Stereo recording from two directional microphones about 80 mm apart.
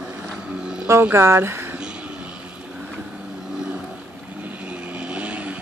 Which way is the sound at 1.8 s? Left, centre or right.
Centre.